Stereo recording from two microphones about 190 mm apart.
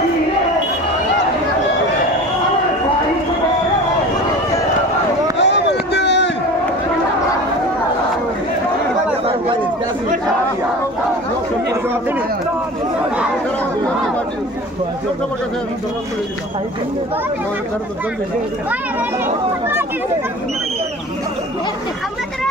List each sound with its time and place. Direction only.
5.4 s run: 65° left (ahead or behind)
9.2 s chatter: 30° right (ahead or behind)